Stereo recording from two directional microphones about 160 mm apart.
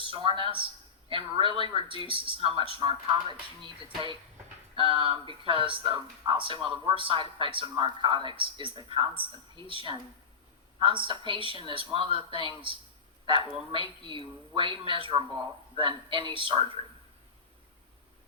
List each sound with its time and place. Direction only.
0.0 s speech: 30° right (ahead or behind)
4.7 s a woman's voice: 30° right (ahead or behind)